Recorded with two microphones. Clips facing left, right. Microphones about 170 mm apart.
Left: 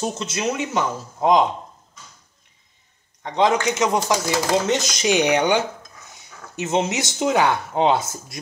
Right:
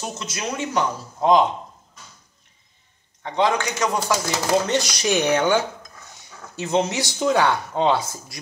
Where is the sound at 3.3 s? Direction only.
20° left (ahead or behind).